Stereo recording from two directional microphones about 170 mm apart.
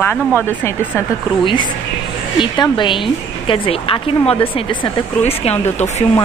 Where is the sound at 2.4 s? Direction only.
30° left (ahead or behind).